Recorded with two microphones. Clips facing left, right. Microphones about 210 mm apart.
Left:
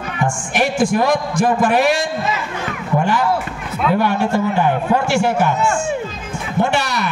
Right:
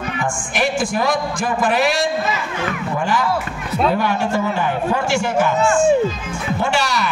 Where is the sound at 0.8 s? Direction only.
65° left (ahead or behind).